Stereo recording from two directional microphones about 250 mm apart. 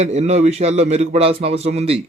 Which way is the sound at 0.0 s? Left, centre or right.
Right.